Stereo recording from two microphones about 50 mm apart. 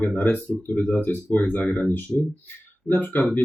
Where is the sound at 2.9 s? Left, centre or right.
Left.